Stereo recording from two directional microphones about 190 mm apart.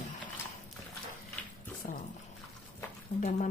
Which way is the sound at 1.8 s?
40° left (ahead or behind).